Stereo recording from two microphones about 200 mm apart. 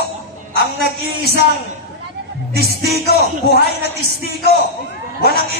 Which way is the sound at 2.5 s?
50° right (ahead or behind).